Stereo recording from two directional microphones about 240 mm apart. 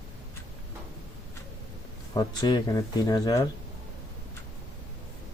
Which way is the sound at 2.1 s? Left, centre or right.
Centre.